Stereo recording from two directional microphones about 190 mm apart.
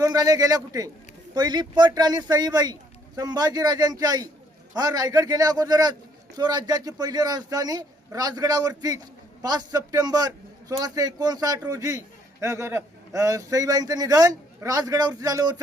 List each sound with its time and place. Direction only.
0.0 s a man's voice: 20° right (ahead or behind)